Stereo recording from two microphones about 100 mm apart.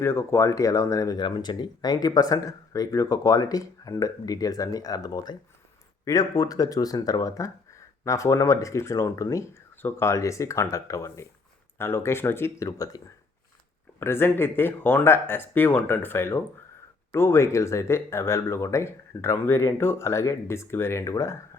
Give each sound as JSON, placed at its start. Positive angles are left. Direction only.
{"t": 0.0, "sound": "speech", "side_deg": 25}
{"t": 14.0, "sound": "speech", "side_deg": 25}